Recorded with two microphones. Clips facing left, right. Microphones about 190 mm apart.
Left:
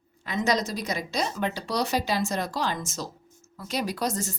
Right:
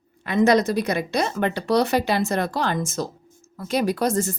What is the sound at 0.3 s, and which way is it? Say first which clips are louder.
Speech: right 8 dB; 60° right (ahead or behind).